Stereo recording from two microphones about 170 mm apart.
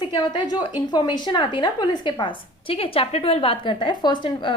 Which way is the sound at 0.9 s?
25° left (ahead or behind).